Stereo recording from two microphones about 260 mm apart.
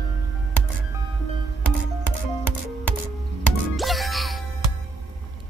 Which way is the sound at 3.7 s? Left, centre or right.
Centre.